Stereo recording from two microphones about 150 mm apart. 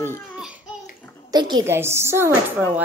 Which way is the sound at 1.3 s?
30° right (ahead or behind).